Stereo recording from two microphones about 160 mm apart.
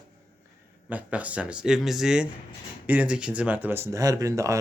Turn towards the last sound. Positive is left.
turn(degrees=-20)  # may be behind; listen again after turning